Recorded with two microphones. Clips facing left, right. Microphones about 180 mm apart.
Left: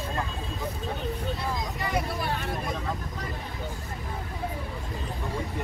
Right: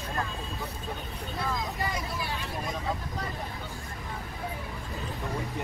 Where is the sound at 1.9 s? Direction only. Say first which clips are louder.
Left 5 dB; 55° left (ahead or behind).